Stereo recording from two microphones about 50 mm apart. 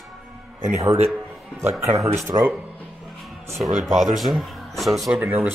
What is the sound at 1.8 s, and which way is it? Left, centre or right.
Speech, right.